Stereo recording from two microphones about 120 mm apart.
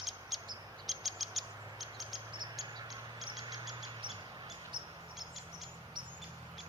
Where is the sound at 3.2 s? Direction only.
40° right (ahead or behind).